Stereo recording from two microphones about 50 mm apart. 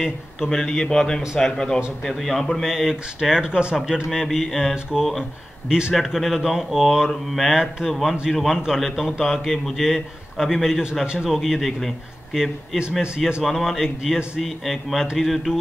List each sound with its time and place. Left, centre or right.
0.5 s a man's voice: centre
2.0 s a man's voice: centre
5.9 s speech: centre
7.1 s a man's voice: centre
7.5 s speech: centre
7.9 s a man's voice: centre
12.4 s speech: centre
13.4 s speech: centre
14.6 s a man's voice: centre